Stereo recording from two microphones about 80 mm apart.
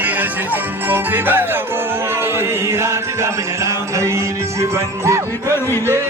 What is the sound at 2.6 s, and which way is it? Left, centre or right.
Music, right.